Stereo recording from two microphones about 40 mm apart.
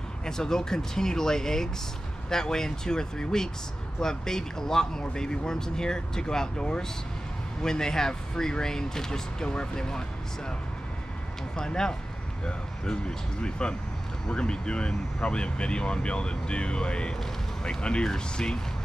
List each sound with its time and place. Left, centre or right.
0.2 s speech: centre
11.5 s speech: centre